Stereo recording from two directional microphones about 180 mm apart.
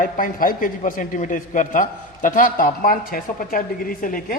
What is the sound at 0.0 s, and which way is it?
A man's voice, 50° left (ahead or behind).